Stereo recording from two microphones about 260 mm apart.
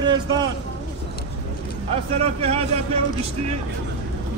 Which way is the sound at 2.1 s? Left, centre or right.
Right.